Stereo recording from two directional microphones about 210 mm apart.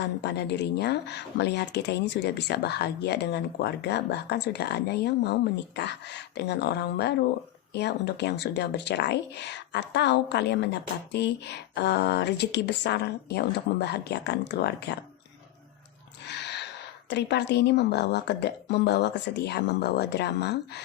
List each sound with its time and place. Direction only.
0.2 s speech: 50° left (ahead or behind)
16.2 s a sound: 55° left (ahead or behind)
17.1 s speech: 55° left (ahead or behind)